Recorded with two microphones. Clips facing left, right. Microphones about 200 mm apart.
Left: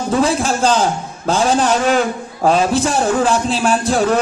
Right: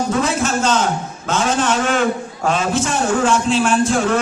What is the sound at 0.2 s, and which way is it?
A man's voice, 35° left (ahead or behind).